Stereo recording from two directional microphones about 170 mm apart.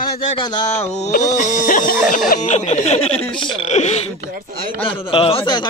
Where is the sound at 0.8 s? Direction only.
40° left (ahead or behind).